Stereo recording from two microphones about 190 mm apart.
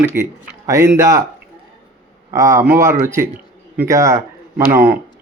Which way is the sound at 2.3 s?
15° right (ahead or behind).